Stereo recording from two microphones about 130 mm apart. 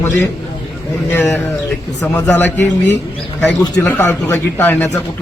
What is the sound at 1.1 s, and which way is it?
A man's voice, 15° left (ahead or behind).